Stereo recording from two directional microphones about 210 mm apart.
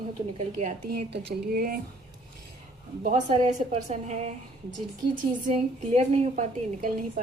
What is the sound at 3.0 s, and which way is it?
A woman's voice, 35° right (ahead or behind).